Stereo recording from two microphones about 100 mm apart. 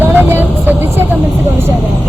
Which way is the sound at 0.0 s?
20° right (ahead or behind).